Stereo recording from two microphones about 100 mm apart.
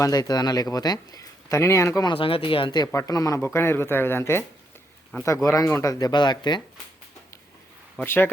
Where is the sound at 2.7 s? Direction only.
40° left (ahead or behind).